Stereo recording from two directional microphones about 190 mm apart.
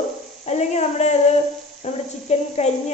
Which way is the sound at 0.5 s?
35° left (ahead or behind).